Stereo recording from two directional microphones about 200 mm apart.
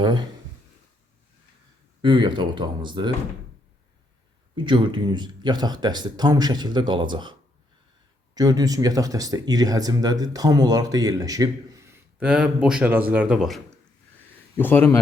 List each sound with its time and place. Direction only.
0.0 s speech: 20° right (ahead or behind)
2.0 s speech: 25° right (ahead or behind)
4.5 s speech: 25° right (ahead or behind)
8.4 s speech: 20° right (ahead or behind); by 13.6 s centre (ahead or behind)
14.6 s speech: 10° left (ahead or behind)